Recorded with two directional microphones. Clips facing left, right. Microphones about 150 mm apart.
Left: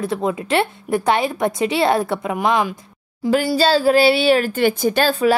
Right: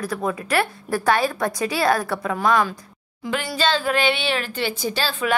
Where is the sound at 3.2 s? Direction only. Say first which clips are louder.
Left 7 dB; 35° left (ahead or behind); by 5.2 s 50° left (ahead or behind).